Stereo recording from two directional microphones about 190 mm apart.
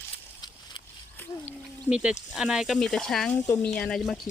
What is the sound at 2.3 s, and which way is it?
Speech, 5° right (ahead or behind).